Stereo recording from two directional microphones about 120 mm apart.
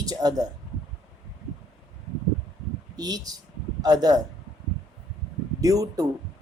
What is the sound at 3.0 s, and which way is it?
Speech, 35° right (ahead or behind).